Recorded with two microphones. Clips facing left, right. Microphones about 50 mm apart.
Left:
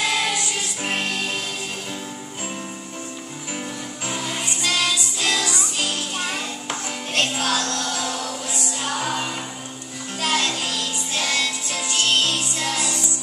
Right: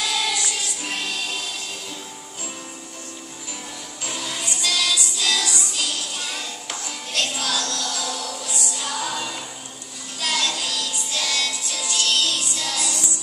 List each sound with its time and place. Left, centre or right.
0.0 s music: left
4.1 s music: left